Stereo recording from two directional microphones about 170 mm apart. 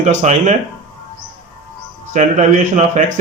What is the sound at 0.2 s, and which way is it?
Speech, 45° right (ahead or behind).